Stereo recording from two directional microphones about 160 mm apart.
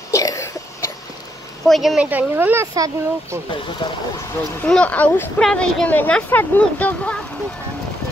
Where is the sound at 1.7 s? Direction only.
Centre (ahead or behind); by 2.9 s 20° right (ahead or behind).